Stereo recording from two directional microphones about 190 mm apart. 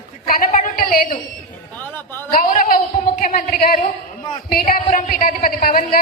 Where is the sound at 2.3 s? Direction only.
45° left (ahead or behind).